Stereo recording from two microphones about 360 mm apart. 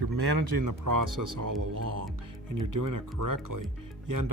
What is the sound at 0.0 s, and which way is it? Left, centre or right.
Speech, right.